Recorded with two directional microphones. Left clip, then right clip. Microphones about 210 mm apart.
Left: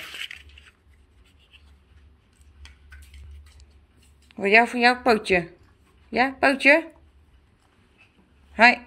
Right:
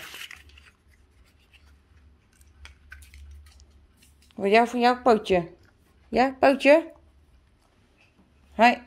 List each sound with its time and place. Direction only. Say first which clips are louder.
0.0 s crushing: left 5 dB; 25° right (ahead or behind)
4.3 s speech: left 2 dB; 20° right (ahead or behind)
6.0 s speech: right 1 dB; 30° right (ahead or behind)
8.5 s speech: left 3 dB; 20° right (ahead or behind)